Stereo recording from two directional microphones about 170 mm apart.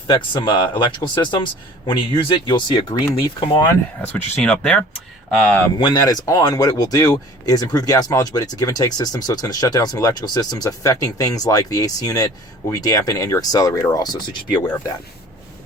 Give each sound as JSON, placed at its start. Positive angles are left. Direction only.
{"t": 0.1, "sound": "speech", "side_deg": 25}
{"t": 4.0, "sound": "speech", "side_deg": 10}
{"t": 6.0, "sound": "speech", "side_deg": 20}